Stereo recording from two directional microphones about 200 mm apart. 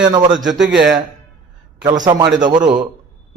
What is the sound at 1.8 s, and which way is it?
Speech, 20° right (ahead or behind).